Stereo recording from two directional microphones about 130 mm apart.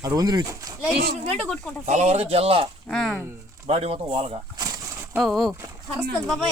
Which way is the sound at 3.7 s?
50° right (ahead or behind).